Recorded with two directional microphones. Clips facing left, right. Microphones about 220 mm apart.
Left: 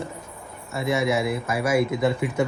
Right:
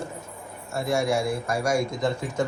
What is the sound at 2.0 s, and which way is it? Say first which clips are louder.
Speech: left 3 dB; 65° left (ahead or behind).